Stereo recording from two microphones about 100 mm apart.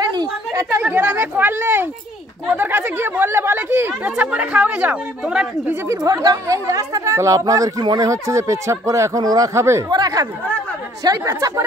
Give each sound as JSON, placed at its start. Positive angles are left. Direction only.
{"t": 0.0, "sound": "chatter", "side_deg": -45}
{"t": 0.5, "sound": "speech", "side_deg": -25}
{"t": 5.9, "sound": "speech", "side_deg": -35}
{"t": 9.8, "sound": "speech", "side_deg": -40}